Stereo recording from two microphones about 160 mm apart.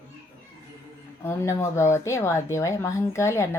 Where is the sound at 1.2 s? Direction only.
15° left (ahead or behind).